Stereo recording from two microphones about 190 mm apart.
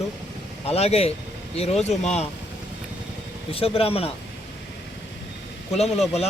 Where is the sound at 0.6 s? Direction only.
35° left (ahead or behind).